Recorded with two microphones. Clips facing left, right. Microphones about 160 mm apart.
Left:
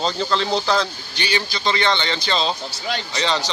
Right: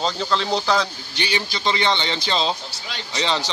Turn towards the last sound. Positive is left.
turn(degrees=-20)  # may be behind; listen again after turning